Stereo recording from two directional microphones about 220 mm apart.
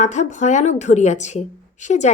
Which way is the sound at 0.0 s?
30° left (ahead or behind).